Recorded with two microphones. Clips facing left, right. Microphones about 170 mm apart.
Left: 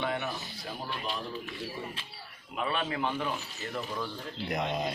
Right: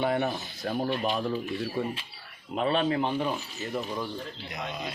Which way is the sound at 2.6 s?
30° right (ahead or behind).